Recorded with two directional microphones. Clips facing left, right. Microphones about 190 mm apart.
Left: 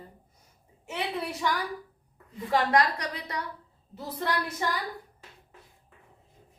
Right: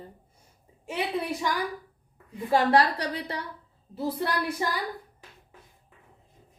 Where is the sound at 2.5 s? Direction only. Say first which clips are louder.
Right 3 dB; 30° right (ahead or behind).